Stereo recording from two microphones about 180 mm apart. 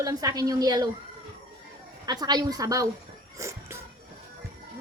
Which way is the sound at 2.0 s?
20° right (ahead or behind).